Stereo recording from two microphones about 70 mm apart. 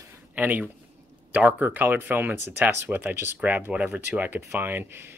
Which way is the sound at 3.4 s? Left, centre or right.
Centre.